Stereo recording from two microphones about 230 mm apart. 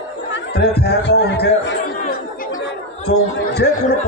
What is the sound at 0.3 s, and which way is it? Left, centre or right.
Speech, left.